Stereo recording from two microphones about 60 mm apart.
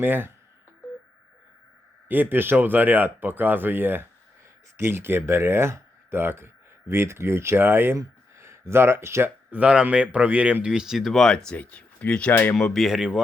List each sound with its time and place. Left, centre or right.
0.0 s speech: right
2.0 s speech: right
9.5 s speech: right
10.7 s speech: centre
11.5 s speech: left
12.5 s speech: centre